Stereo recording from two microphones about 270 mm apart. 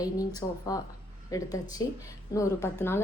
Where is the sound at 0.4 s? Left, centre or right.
Centre.